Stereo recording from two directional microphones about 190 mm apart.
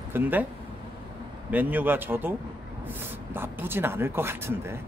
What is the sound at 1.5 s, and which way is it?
Speech, 10° right (ahead or behind).